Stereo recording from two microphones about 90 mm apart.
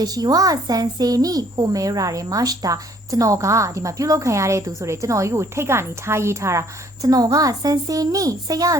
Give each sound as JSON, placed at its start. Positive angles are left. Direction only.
{"t": 0.0, "sound": "a woman's voice", "side_deg": -45}